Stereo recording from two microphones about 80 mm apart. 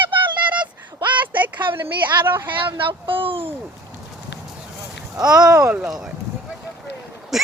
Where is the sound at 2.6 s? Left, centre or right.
Right.